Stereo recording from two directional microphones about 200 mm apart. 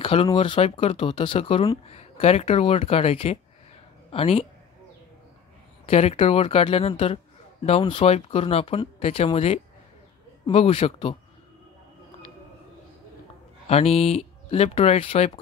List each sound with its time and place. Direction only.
0.0 s speech: 25° left (ahead or behind)
5.9 s speech: 30° left (ahead or behind)
13.7 s speech: 30° left (ahead or behind)